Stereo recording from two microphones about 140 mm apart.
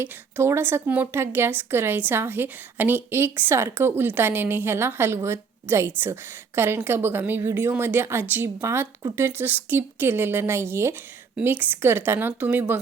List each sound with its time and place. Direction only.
0.0 s a woman's voice: 15° right (ahead or behind)